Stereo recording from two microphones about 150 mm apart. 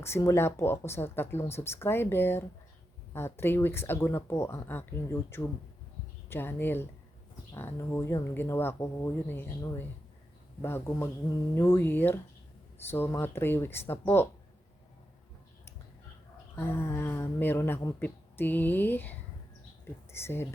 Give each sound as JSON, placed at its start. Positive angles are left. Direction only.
{"t": 0.0, "sound": "speech", "side_deg": 20}
{"t": 16.6, "sound": "speech", "side_deg": 15}
{"t": 20.1, "sound": "speech", "side_deg": 15}